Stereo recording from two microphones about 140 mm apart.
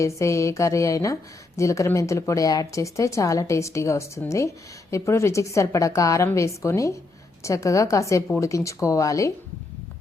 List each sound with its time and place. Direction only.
0.0 s speech: 20° left (ahead or behind)